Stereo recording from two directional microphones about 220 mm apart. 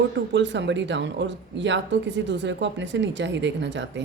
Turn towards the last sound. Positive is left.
turn(degrees=-55)  # may be behind; listen again after turning